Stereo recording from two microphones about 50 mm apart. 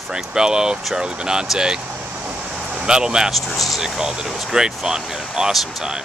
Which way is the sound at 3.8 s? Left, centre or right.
Centre.